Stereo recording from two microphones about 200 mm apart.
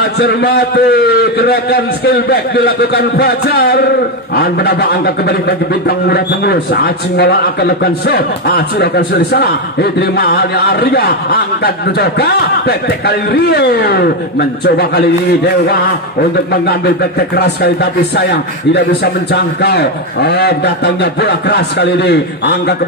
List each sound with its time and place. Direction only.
0.2 s a man's voice: 55° left (ahead or behind)
18.1 s a man's voice: 60° left (ahead or behind)